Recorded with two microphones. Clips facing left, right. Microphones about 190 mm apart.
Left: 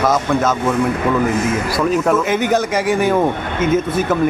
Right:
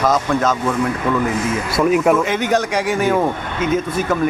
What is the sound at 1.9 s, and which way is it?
Speech, 10° right (ahead or behind).